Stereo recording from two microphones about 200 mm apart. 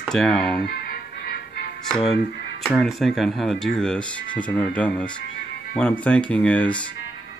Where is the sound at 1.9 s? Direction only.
Centre (ahead or behind).